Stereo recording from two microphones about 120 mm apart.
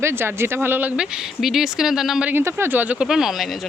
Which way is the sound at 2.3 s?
20° right (ahead or behind).